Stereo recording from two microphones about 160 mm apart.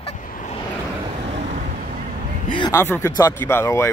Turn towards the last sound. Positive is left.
turn(degrees=15)  # may be behind; listen again after turning